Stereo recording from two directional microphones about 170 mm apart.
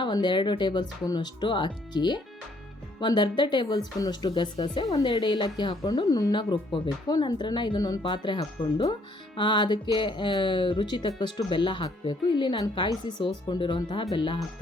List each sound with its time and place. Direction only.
0.0 s speech: 25° left (ahead or behind)